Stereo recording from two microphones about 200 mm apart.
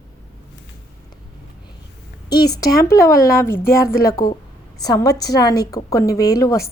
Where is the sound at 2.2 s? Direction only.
20° left (ahead or behind).